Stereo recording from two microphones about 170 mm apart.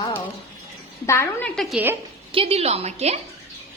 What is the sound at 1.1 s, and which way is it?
Speech, 15° left (ahead or behind).